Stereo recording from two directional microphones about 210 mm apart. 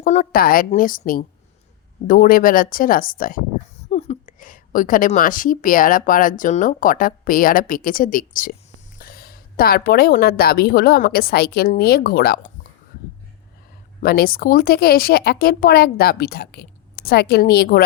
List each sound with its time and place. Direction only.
0.0 s a woman's voice: 35° left (ahead or behind)
14.0 s a woman's voice: 45° left (ahead or behind)